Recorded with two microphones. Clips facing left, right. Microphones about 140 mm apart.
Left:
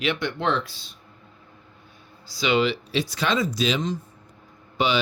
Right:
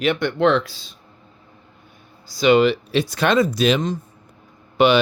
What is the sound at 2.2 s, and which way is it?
Speech, 50° right (ahead or behind).